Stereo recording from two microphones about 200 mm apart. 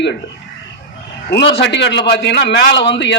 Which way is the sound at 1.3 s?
60° left (ahead or behind).